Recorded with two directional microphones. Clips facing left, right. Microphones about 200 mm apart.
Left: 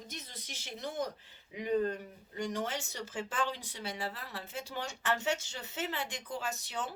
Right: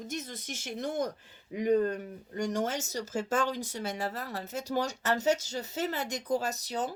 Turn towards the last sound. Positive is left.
turn(degrees=-40)  # may be behind; listen again after turning